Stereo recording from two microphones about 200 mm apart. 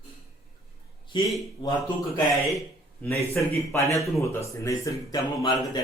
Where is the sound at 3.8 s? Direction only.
15° left (ahead or behind).